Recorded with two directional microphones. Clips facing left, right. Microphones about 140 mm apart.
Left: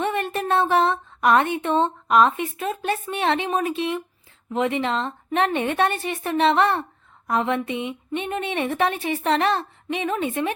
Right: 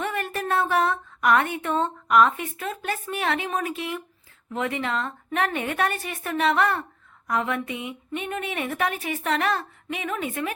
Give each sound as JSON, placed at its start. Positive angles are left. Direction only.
{"t": 0.0, "sound": "speech", "side_deg": 25}